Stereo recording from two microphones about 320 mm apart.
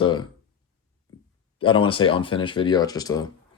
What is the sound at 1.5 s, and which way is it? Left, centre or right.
Speech, centre.